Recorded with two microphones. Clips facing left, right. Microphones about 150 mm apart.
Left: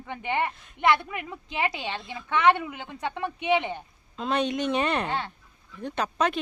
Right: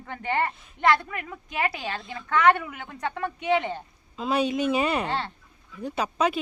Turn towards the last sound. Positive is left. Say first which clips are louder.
# right 1 dB
turn(degrees=-5)  # may be behind; listen again after turning